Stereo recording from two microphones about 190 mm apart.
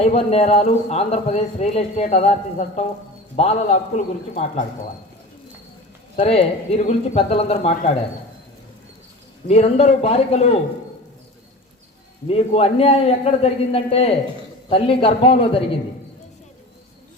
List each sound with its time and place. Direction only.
0.0 s speech: 35° left (ahead or behind)
6.1 s speech: 30° left (ahead or behind)
9.5 s speech: 35° left (ahead or behind)
12.3 s a man's voice: 30° left (ahead or behind)